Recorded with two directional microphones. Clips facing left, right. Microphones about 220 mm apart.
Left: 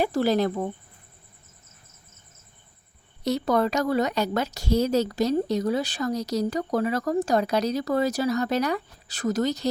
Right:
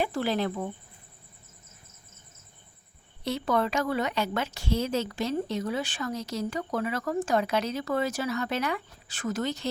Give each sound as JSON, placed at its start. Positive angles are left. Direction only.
{"t": 0.0, "sound": "a woman's voice", "side_deg": 40}
{"t": 3.2, "sound": "a woman's voice", "side_deg": 40}